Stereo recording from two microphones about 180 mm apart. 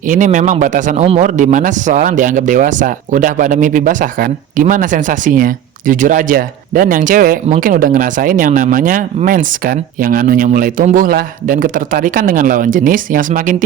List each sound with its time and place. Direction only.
0.1 s a man's voice: 45° right (ahead or behind)